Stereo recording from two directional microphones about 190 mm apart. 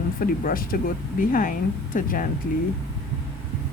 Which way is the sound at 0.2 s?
50° left (ahead or behind).